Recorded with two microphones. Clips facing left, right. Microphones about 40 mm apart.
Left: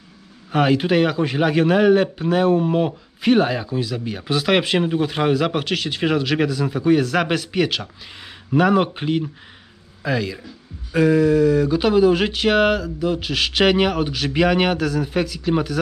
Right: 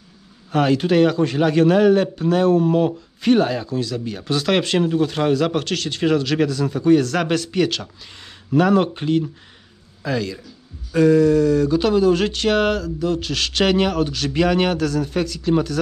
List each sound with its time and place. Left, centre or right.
0.5 s a man's voice: centre